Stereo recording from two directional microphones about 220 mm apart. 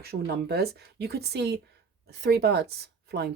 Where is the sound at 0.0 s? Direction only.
45° right (ahead or behind).